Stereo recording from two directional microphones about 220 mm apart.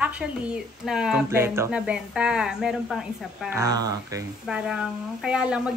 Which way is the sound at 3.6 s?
15° right (ahead or behind).